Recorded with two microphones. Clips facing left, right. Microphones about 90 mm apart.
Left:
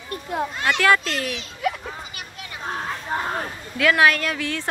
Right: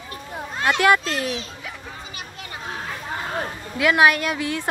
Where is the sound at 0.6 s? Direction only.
30° right (ahead or behind).